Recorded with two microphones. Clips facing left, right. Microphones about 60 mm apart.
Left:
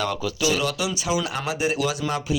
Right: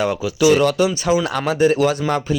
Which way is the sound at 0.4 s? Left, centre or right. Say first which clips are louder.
Right 10 dB; right.